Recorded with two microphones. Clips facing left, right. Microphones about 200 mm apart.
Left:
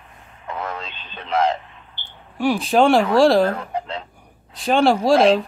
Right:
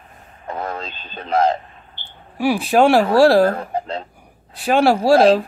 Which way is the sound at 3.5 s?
40° right (ahead or behind).